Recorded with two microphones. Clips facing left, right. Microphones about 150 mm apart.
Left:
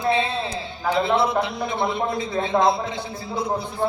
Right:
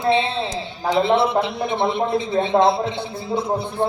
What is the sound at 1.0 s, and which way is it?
Speech, 25° right (ahead or behind).